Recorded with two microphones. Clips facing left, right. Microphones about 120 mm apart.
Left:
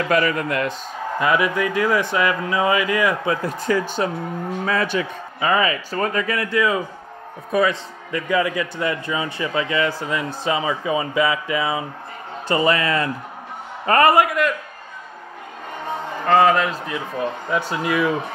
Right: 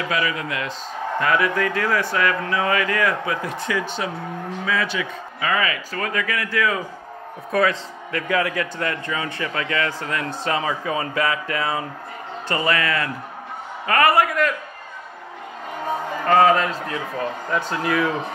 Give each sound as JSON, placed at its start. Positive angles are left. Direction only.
{"t": 0.1, "sound": "speech", "side_deg": 50}
{"t": 1.2, "sound": "a man's voice", "side_deg": 15}
{"t": 3.3, "sound": "speech", "side_deg": 40}
{"t": 5.4, "sound": "speech", "side_deg": 25}
{"t": 7.5, "sound": "a man's voice", "side_deg": 5}
{"t": 12.4, "sound": "speech", "side_deg": 20}
{"t": 14.4, "sound": "a man's voice", "side_deg": 0}
{"t": 16.3, "sound": "a man's voice", "side_deg": 0}